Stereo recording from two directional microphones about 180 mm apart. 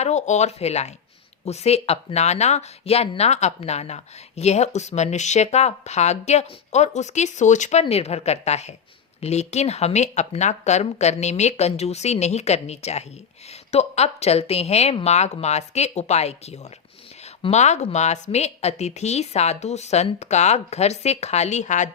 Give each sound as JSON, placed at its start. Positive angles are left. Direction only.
{"t": 0.0, "sound": "speech", "side_deg": 40}